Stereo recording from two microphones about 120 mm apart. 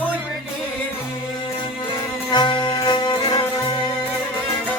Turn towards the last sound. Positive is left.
turn(degrees=40)  # may be behind; listen again after turning